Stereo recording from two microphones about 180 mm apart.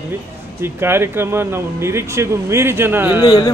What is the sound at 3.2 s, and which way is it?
Speech, 20° left (ahead or behind).